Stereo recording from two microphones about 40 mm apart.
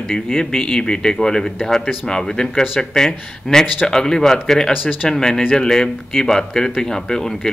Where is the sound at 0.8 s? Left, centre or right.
Left.